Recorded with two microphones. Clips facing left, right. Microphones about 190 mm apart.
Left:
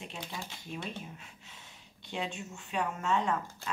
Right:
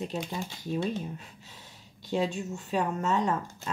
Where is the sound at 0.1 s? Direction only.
40° right (ahead or behind).